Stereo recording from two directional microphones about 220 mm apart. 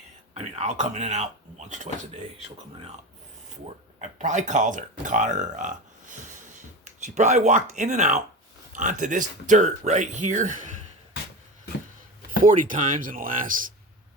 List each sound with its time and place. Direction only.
0.3 s speech: 30° right (ahead or behind)
4.2 s speech: 35° right (ahead or behind)
12.4 s speech: 40° right (ahead or behind)